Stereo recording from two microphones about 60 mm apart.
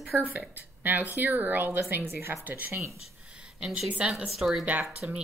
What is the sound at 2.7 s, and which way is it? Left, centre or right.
Speech, right.